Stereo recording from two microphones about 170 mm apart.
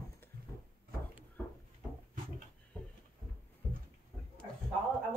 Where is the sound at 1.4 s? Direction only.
10° left (ahead or behind).